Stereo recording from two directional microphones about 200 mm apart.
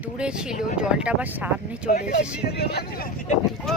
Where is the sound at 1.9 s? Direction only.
40° left (ahead or behind).